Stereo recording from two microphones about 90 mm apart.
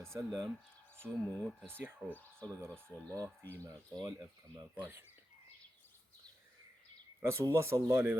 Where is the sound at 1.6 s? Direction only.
25° right (ahead or behind).